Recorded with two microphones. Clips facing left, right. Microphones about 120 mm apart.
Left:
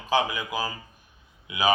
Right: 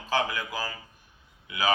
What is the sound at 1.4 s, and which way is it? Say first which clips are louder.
Speech: left 3 dB; 20° left (ahead or behind).